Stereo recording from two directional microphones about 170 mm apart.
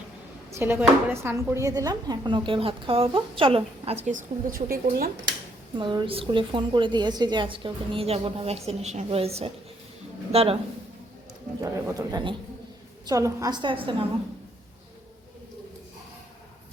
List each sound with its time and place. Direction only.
0.5 s speech: 15° right (ahead or behind); by 5.1 s 60° right (ahead or behind)
5.7 s a woman's voice: 25° right (ahead or behind)
11.6 s speech: 20° right (ahead or behind)